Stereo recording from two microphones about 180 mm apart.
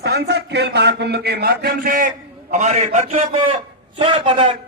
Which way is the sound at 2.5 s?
40° right (ahead or behind).